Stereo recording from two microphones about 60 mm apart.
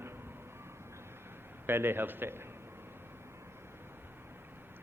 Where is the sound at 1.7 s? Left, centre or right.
Right.